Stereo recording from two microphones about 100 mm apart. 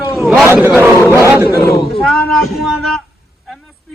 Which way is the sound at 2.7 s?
Centre (ahead or behind).